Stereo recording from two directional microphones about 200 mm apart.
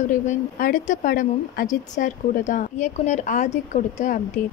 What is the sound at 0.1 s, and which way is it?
Speech, 40° left (ahead or behind).